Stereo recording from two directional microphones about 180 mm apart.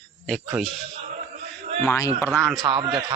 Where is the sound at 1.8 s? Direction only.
15° left (ahead or behind).